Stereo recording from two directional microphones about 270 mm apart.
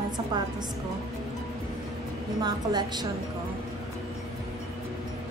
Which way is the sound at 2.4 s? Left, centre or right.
Centre.